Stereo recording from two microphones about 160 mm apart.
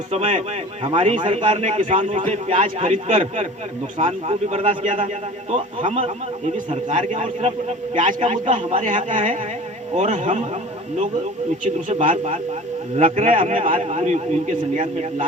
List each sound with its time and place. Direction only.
0.1 s a man's voice: 45° right (ahead or behind)
11.6 s a man's voice: 50° right (ahead or behind)
13.7 s a man's voice: 40° right (ahead or behind)